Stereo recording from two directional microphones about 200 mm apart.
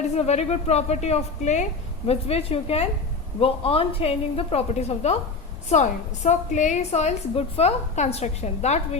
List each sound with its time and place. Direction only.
0.2 s a woman's voice: 30° left (ahead or behind)